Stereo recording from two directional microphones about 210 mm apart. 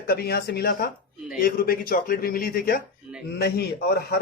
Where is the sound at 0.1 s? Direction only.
50° left (ahead or behind).